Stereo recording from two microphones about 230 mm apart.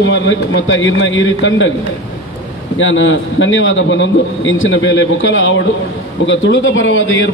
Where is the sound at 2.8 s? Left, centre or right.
Left.